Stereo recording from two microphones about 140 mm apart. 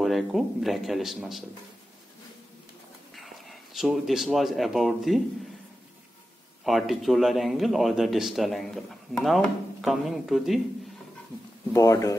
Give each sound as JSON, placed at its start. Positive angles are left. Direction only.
{"t": 0.0, "sound": "a man's voice", "side_deg": 0}
{"t": 3.2, "sound": "speech", "side_deg": 0}
{"t": 6.6, "sound": "a man's voice", "side_deg": 0}
{"t": 11.7, "sound": "speech", "side_deg": 25}